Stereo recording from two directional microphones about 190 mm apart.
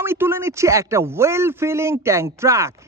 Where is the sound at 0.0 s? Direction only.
10° right (ahead or behind).